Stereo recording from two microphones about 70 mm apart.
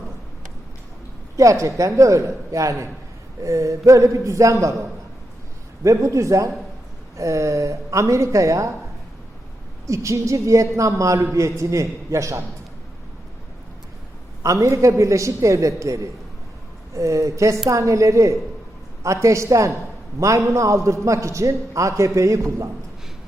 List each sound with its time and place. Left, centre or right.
1.4 s a man's voice: right
5.8 s a man's voice: right
9.8 s a man's voice: right
14.4 s a man's voice: right